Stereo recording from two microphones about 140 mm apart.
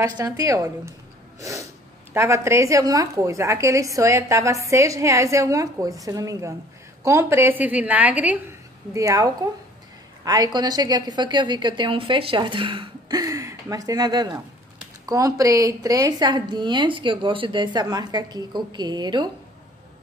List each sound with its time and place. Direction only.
0.0 s a woman's voice: 25° right (ahead or behind)
1.4 s sneeze: 20° right (ahead or behind)
2.1 s a woman's voice: 20° right (ahead or behind)
8.9 s a woman's voice: 25° right (ahead or behind)